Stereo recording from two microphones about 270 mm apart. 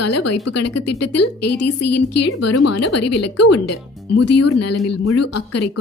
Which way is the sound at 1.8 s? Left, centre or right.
Left.